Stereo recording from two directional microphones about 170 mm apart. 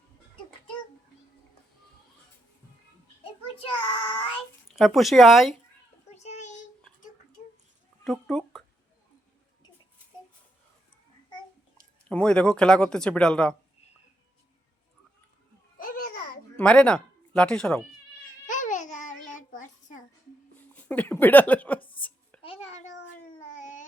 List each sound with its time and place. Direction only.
3.4 s child singing: 30° left (ahead or behind)
4.7 s speech: centre (ahead or behind)
6.1 s child singing: 40° left (ahead or behind)
8.0 s cat: centre (ahead or behind)
12.0 s speech: 5° left (ahead or behind)
15.8 s babbling: 55° left (ahead or behind)
16.6 s speech: 5° left (ahead or behind)
18.4 s babbling: 50° left (ahead or behind)
19.3 s a sound: 50° left (ahead or behind)
20.6 s speech: 10° left (ahead or behind)
22.4 s a sound: 35° left (ahead or behind)